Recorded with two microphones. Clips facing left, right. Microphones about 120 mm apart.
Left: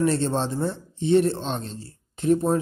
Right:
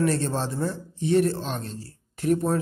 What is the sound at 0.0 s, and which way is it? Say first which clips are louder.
Speech: left 2 dB; 25° left (ahead or behind).